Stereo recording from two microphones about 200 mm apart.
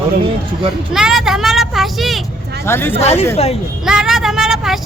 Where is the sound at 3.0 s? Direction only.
30° left (ahead or behind).